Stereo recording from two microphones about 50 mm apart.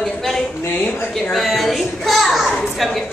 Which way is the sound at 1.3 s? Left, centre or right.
Centre.